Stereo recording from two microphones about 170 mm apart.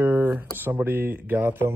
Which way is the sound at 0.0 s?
10° right (ahead or behind).